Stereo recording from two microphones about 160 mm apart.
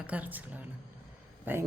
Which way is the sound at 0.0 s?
10° right (ahead or behind).